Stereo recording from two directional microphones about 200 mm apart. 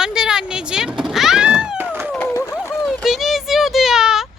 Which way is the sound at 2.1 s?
10° left (ahead or behind).